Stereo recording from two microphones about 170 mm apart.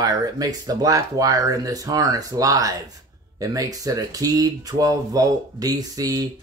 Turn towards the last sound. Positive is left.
turn(degrees=-20)  # may be behind; listen again after turning